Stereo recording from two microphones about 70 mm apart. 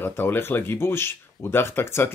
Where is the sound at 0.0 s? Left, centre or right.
Left.